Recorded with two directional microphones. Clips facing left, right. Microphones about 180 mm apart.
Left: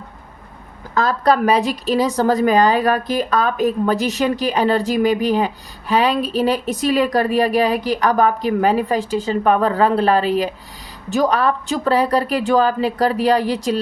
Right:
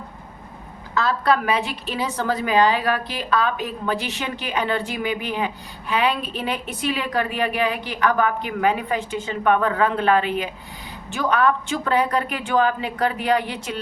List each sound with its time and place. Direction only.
0.9 s speech: 40° left (ahead or behind)